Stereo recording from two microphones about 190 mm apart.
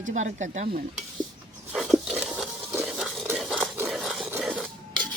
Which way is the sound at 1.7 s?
Centre (ahead or behind).